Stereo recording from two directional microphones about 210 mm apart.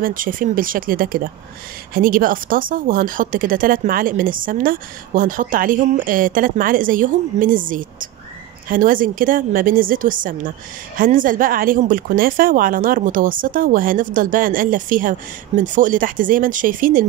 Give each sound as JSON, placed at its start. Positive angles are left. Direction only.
{"t": 0.0, "sound": "speech", "side_deg": -40}